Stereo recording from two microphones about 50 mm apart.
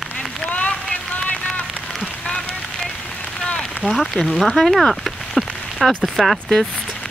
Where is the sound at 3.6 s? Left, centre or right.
Centre.